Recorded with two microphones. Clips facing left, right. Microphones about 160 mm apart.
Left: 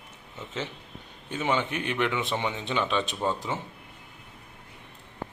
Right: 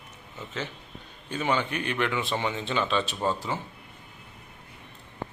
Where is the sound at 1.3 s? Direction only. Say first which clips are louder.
Even; 20° left (ahead or behind).